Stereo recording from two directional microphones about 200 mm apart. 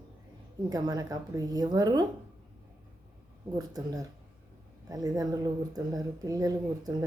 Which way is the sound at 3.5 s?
20° right (ahead or behind).